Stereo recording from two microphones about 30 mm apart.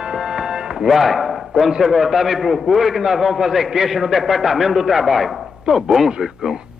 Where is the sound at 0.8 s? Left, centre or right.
Centre.